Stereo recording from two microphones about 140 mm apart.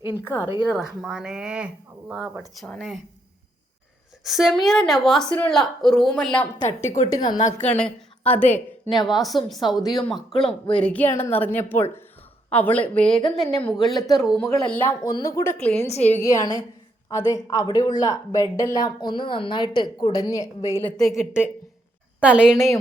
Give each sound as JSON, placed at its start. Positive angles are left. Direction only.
{"t": 0.3, "sound": "a woman's voice", "side_deg": -15}
{"t": 0.7, "sound": "speech", "side_deg": -5}
{"t": 4.2, "sound": "speech", "side_deg": 0}
{"t": 6.8, "sound": "a woman's voice", "side_deg": 50}
{"t": 7.6, "sound": "a woman's voice", "side_deg": 10}
{"t": 9.2, "sound": "speech", "side_deg": 0}
{"t": 15.5, "sound": "speech", "side_deg": 5}
{"t": 16.0, "sound": "speech", "side_deg": 20}
{"t": 20.8, "sound": "speech", "side_deg": 5}